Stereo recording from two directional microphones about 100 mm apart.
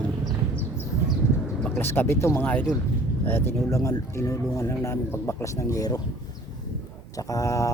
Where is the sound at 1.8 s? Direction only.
20° left (ahead or behind).